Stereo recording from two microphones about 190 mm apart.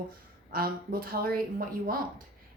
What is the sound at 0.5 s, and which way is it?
A woman's voice, 50° right (ahead or behind).